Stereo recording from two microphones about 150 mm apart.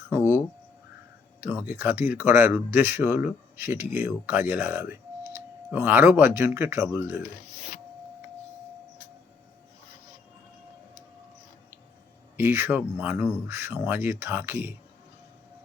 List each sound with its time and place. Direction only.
0.1 s speech: 15° right (ahead or behind)
1.4 s speech: 15° right (ahead or behind)
12.4 s speech: 15° right (ahead or behind)